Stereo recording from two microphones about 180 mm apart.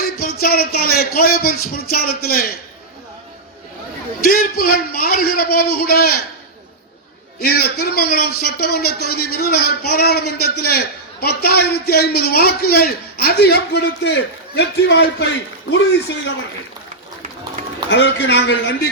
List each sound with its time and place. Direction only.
0.0 s speech: 55° left (ahead or behind)
4.2 s a man's voice: 55° left (ahead or behind)
7.3 s a man's voice: 60° left (ahead or behind)
17.8 s a man's voice: 75° left (ahead or behind)